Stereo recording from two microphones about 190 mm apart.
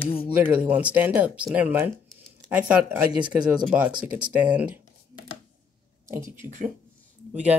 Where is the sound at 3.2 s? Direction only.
5° right (ahead or behind).